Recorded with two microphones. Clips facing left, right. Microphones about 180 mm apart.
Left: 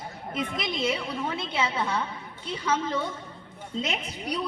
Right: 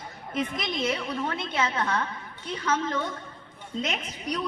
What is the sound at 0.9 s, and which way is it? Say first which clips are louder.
A woman's voice: right 1 dB; 5° left (ahead or behind).